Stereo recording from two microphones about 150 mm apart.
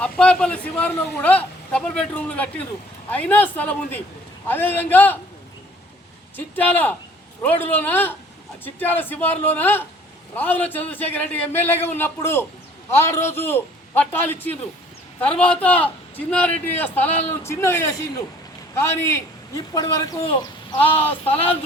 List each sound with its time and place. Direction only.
0.0 s speech: 5° left (ahead or behind)
6.3 s speech: 10° left (ahead or behind)
20.8 s a sound: 40° left (ahead or behind)